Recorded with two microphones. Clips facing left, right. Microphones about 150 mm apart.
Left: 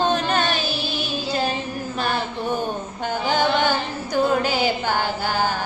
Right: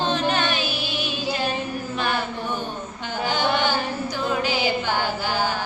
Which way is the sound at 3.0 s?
50° left (ahead or behind).